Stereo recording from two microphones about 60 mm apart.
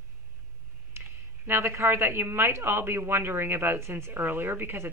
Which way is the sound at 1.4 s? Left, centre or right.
Right.